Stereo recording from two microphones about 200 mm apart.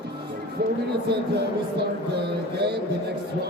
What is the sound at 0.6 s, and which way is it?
Speech, 50° right (ahead or behind).